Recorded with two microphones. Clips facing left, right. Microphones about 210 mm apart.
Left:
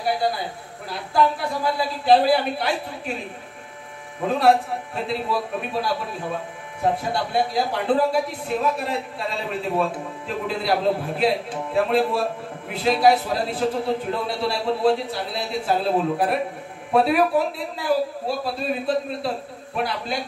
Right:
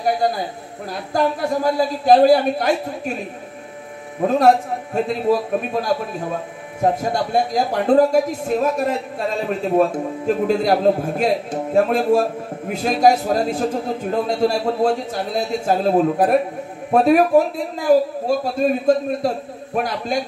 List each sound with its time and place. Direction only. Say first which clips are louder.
0.2 s speech: right 4 dB; 45° right (ahead or behind)
4.3 s speech: right 3 dB; 45° right (ahead or behind)